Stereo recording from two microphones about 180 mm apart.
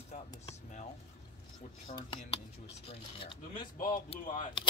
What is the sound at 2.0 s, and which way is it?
Speech, 25° left (ahead or behind).